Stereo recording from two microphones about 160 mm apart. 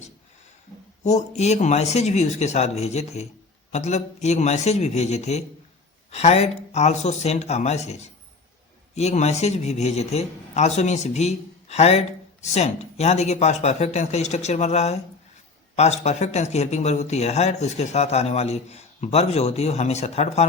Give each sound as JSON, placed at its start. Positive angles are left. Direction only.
{"t": 1.0, "sound": "a man's voice", "side_deg": 45}